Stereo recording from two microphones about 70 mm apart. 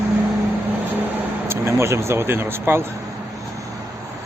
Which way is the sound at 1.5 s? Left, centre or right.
Right.